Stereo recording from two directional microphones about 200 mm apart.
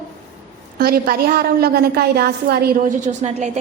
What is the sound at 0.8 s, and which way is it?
A woman's voice, 50° right (ahead or behind).